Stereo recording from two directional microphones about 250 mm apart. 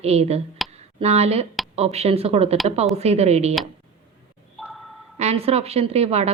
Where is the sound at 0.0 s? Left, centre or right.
Right.